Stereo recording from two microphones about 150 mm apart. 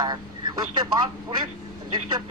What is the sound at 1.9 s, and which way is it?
Speech, 30° right (ahead or behind).